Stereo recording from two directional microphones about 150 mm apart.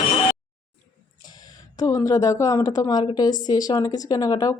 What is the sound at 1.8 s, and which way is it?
A woman's voice, 20° left (ahead or behind).